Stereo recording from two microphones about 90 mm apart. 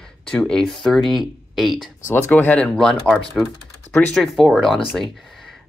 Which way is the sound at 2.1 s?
20° left (ahead or behind).